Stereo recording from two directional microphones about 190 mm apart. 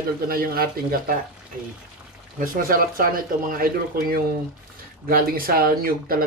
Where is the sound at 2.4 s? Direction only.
45° right (ahead or behind).